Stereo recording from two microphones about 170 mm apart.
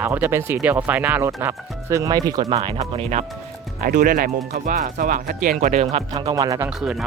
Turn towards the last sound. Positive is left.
turn(degrees=0)  # may be behind; listen again after turning